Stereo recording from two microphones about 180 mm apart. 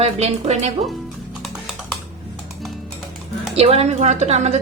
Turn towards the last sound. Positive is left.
turn(degrees=-40)  # may be behind; listen again after turning